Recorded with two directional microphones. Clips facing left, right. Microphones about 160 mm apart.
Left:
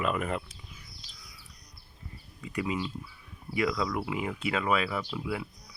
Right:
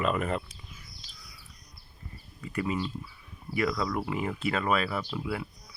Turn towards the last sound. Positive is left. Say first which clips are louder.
# even
turn(degrees=10)  # may be behind; listen again after turning